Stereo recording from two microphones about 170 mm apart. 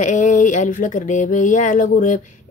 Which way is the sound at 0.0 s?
50° left (ahead or behind).